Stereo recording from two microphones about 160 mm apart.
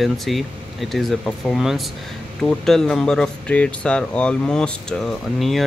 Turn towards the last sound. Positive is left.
turn(degrees=0)  # may be behind; listen again after turning